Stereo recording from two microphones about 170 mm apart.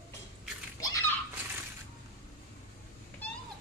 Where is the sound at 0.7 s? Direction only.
20° left (ahead or behind).